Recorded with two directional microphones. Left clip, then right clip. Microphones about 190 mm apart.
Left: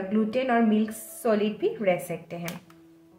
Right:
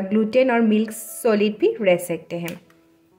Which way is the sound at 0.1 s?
45° right (ahead or behind).